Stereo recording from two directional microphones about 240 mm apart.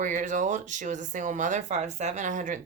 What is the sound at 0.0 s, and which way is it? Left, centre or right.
Speech, right.